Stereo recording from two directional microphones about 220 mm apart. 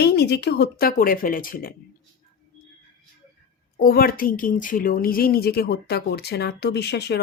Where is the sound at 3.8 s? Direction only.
40° left (ahead or behind).